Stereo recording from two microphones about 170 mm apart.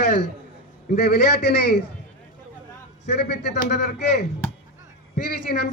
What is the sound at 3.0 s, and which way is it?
Speech, 75° left (ahead or behind).